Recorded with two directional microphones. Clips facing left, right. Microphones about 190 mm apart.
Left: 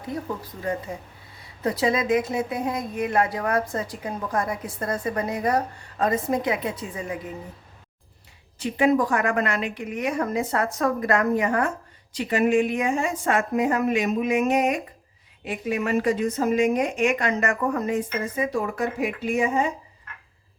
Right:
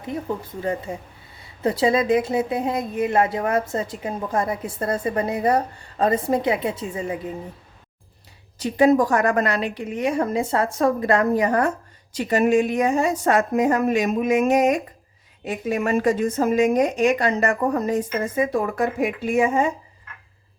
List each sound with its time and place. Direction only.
0.6 s speech: 30° right (ahead or behind)
8.5 s a woman's voice: 40° right (ahead or behind)